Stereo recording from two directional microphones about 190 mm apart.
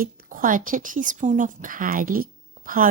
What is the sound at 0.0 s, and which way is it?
A woman's voice, 45° right (ahead or behind).